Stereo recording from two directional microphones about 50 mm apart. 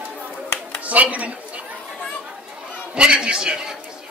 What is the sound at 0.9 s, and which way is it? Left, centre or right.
Speech, right.